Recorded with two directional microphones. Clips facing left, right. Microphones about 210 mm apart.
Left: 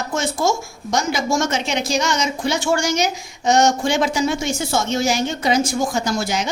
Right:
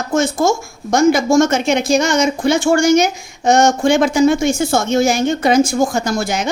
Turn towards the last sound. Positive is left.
turn(degrees=-50)  # may be behind; listen again after turning